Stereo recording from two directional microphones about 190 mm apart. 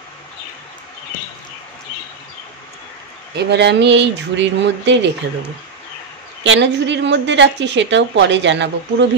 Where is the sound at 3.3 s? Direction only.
65° right (ahead or behind).